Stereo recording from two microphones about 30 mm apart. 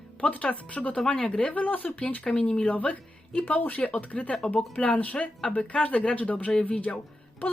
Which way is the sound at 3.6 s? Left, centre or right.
Left.